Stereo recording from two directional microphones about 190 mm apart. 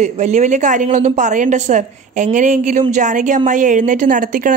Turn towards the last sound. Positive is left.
turn(degrees=-45)  # may be behind; listen again after turning